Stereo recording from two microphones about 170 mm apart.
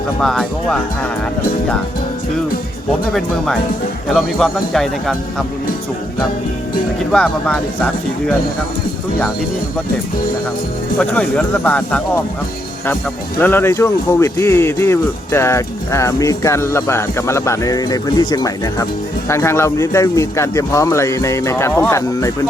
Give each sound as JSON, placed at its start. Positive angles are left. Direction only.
{"t": 0.2, "sound": "speech", "side_deg": 5}
{"t": 3.1, "sound": "speech", "side_deg": 0}
{"t": 7.1, "sound": "speech", "side_deg": 5}
{"t": 10.9, "sound": "speech", "side_deg": 5}
{"t": 13.4, "sound": "speech", "side_deg": 15}